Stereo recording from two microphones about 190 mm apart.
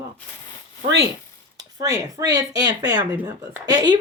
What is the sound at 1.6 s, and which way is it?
Speech, 20° right (ahead or behind).